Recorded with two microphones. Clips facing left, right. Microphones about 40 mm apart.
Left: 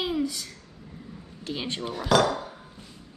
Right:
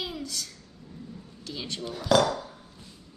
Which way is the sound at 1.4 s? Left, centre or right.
Left.